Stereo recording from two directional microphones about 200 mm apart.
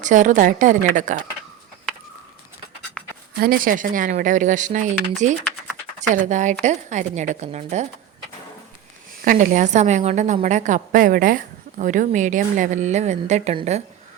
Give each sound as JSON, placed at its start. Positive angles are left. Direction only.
{"t": 0.0, "sound": "a woman's voice", "side_deg": -40}
{"t": 3.0, "sound": "writing", "side_deg": 5}
{"t": 3.3, "sound": "a woman's voice", "side_deg": -50}
{"t": 9.2, "sound": "a woman's voice", "side_deg": -40}